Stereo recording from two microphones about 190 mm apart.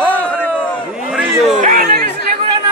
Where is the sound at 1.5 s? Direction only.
50° right (ahead or behind).